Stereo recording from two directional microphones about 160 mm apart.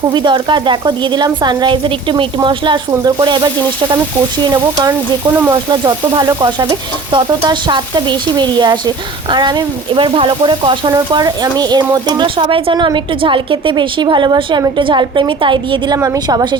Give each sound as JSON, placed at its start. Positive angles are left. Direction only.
{"t": 0.1, "sound": "speech", "side_deg": -30}